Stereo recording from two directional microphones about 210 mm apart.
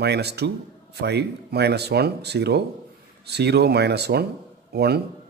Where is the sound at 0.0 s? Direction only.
50° right (ahead or behind).